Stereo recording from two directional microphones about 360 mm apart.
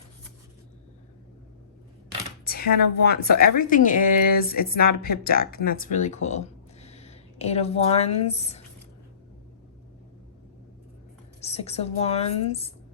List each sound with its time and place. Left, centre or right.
2.4 s a sound: left
3.1 s speech: left
11.3 s speech: centre